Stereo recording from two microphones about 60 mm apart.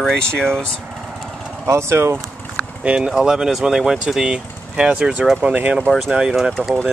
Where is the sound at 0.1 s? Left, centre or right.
Centre.